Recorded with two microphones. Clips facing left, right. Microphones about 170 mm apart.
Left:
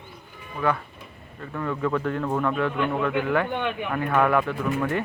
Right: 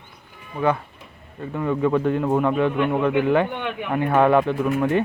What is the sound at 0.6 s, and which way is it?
Speech, 20° right (ahead or behind).